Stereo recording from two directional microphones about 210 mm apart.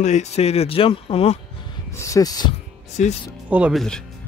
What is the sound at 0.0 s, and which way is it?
Speech, 35° left (ahead or behind).